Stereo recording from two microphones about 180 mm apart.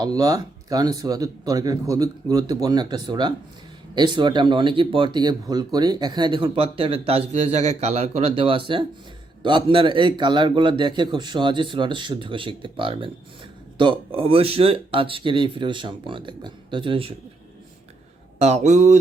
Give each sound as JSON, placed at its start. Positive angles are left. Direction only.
{"t": 0.0, "sound": "speech", "side_deg": -20}
{"t": 18.3, "sound": "speech", "side_deg": -35}